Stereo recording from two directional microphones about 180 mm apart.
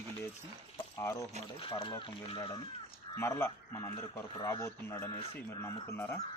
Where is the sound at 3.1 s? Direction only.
15° left (ahead or behind).